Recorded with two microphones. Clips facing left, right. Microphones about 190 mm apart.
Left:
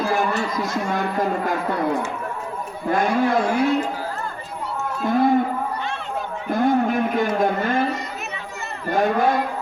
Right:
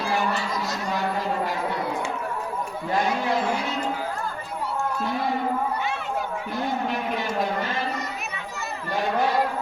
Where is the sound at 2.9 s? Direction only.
55° left (ahead or behind).